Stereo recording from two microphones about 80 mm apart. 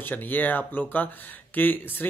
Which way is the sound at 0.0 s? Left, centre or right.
Left.